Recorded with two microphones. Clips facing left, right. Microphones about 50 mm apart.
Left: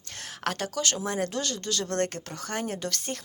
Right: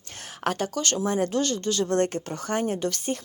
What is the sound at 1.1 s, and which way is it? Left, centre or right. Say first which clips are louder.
Speech: right 5 dB; centre.